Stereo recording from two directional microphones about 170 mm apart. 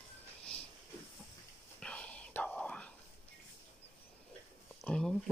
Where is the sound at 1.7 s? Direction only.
5° left (ahead or behind).